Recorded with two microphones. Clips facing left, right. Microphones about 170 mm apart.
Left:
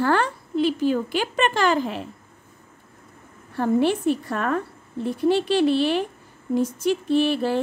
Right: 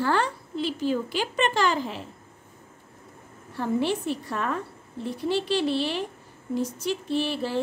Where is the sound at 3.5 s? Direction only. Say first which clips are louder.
Left 5 dB; 55° left (ahead or behind).